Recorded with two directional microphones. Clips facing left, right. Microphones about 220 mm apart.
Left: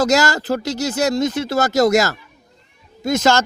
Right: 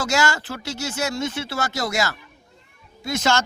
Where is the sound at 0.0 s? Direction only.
40° left (ahead or behind).